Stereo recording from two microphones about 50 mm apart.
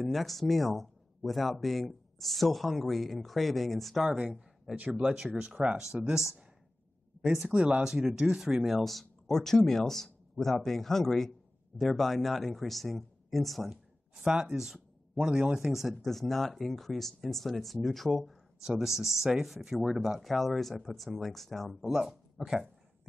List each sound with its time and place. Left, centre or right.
0.1 s speech: centre
4.0 s speech: centre
7.5 s speech: centre
8.6 s speech: centre
14.2 s speech: centre